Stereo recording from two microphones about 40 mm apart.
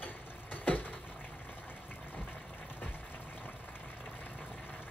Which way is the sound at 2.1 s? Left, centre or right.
Left.